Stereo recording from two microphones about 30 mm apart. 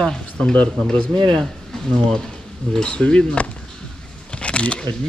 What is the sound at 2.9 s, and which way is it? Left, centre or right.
Speech, left.